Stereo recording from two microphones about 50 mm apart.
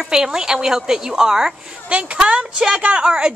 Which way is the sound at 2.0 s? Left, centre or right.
Right.